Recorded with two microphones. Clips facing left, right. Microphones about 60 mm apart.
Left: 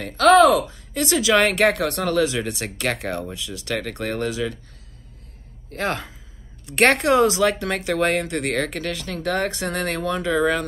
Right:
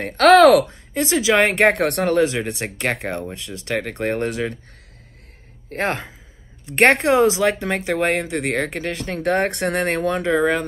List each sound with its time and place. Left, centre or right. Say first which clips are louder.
0.2 s speech: right 3 dB; right
0.9 s speech: right 1 dB; right
3.3 s speech: right 2 dB; right
5.7 s speech: right 2 dB; right